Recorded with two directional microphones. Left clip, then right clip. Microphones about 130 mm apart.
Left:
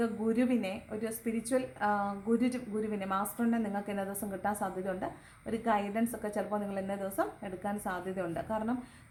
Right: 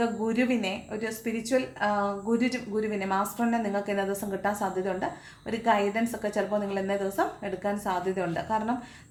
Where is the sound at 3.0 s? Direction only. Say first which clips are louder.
Right 5 dB; 25° left (ahead or behind).